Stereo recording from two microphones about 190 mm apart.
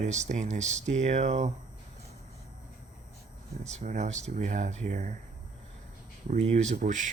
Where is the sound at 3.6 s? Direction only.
40° right (ahead or behind).